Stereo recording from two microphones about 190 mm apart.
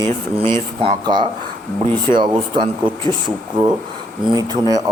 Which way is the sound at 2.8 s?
25° right (ahead or behind).